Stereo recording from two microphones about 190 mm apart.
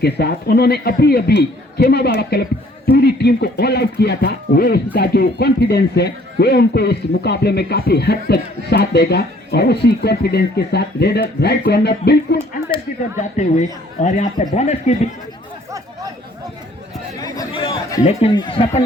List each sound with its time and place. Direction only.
0.0 s speech: 55° left (ahead or behind)
12.7 s speech: 25° left (ahead or behind)
13.1 s speech: 40° left (ahead or behind)
17.2 s speech: 20° left (ahead or behind)